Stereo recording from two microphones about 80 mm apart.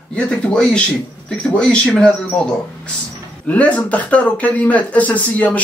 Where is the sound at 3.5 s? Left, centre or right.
Centre.